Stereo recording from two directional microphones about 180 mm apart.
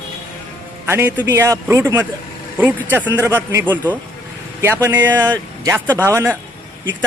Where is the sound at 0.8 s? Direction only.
10° right (ahead or behind).